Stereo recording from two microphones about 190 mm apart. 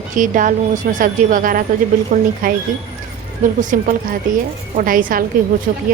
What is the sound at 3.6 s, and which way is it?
Speech, 45° right (ahead or behind).